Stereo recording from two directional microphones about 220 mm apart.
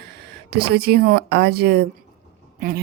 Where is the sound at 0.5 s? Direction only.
45° right (ahead or behind).